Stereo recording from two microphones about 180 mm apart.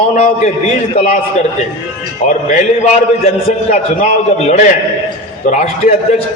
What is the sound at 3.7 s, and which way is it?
A man's voice, 40° left (ahead or behind).